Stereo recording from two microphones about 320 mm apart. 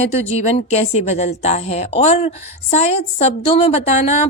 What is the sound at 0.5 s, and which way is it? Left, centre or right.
A woman's voice, centre.